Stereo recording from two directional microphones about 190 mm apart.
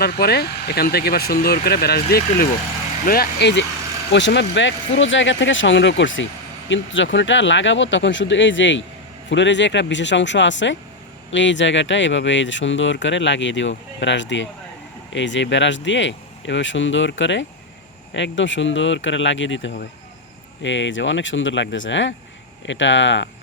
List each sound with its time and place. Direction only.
0.0 s speech: 55° left (ahead or behind); by 23.3 s 75° left (ahead or behind)